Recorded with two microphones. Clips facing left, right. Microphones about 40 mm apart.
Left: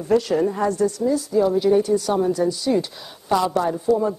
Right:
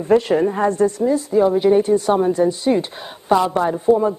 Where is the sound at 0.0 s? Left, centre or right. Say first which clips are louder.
Right 4 dB; right.